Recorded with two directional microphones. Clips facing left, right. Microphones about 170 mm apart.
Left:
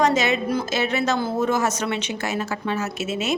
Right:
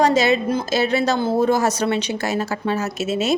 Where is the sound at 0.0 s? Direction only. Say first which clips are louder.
Right 4 dB; 35° right (ahead or behind).